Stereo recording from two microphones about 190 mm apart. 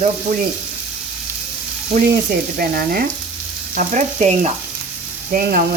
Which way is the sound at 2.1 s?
55° right (ahead or behind).